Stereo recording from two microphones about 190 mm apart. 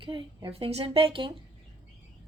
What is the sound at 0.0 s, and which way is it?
A woman's voice, 25° right (ahead or behind).